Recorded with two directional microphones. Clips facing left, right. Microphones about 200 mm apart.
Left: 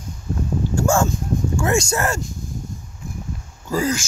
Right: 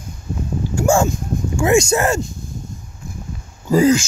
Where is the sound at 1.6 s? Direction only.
15° right (ahead or behind).